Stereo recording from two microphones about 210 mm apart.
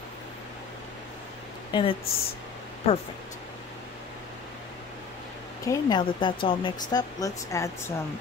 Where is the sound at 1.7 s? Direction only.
25° left (ahead or behind).